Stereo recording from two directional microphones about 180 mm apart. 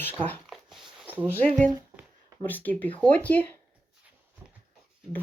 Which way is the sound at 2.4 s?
10° left (ahead or behind).